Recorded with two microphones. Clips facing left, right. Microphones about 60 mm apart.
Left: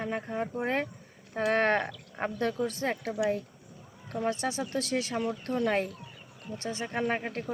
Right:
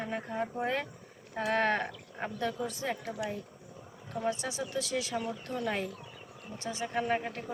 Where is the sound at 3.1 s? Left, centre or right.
Left.